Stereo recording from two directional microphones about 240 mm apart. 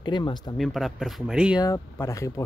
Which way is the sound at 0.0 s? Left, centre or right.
Centre.